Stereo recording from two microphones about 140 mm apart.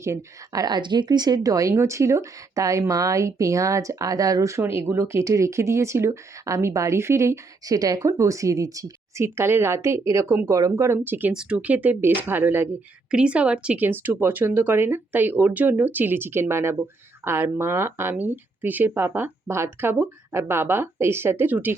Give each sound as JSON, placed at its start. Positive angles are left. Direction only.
{"t": 0.0, "sound": "speech", "side_deg": -20}